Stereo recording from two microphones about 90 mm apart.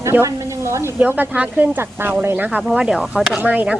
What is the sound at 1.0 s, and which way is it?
A woman's voice, 20° right (ahead or behind).